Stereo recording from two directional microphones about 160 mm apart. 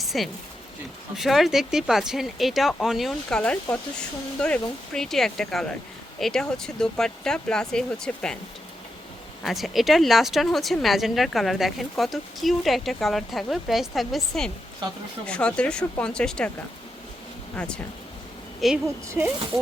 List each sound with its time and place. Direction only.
0.0 s a sound: centre (ahead or behind)
1.1 s a woman's voice: centre (ahead or behind)
9.4 s a woman's voice: centre (ahead or behind)
18.6 s a woman's voice: centre (ahead or behind)
19.0 s speech: 15° right (ahead or behind)